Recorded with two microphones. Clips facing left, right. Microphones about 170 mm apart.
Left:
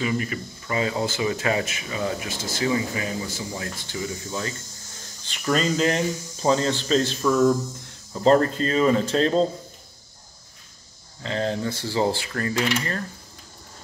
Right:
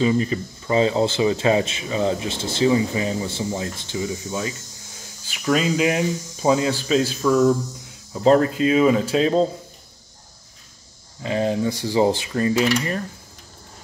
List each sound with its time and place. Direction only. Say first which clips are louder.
0.0 s speech: right 6 dB; 25° right (ahead or behind)
5.2 s speech: right 3 dB; 5° right (ahead or behind)
11.2 s speech: right 4 dB; 15° right (ahead or behind)